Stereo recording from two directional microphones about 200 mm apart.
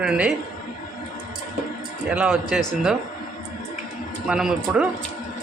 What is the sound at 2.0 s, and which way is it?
Speech, 5° right (ahead or behind).